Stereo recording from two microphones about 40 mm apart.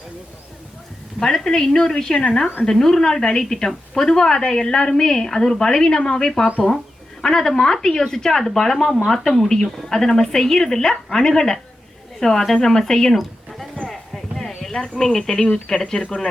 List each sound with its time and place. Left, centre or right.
1.2 s a woman's voice: centre
13.8 s a sound: centre
15.4 s speech: left